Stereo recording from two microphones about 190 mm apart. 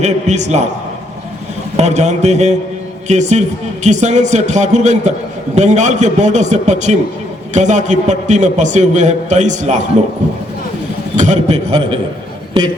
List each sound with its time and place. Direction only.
0.0 s a man's voice: 35° right (ahead or behind)
1.7 s a man's voice: 35° right (ahead or behind)
11.2 s a man's voice: 35° right (ahead or behind)